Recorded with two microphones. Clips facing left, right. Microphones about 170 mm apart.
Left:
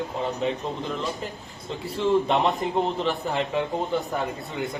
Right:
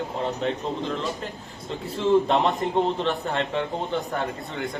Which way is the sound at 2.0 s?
Centre (ahead or behind).